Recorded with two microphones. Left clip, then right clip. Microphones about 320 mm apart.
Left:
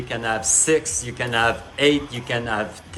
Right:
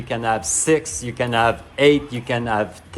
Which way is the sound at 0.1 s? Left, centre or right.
Centre.